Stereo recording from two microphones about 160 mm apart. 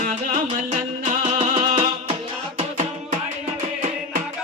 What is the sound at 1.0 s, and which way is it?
Music, 45° right (ahead or behind).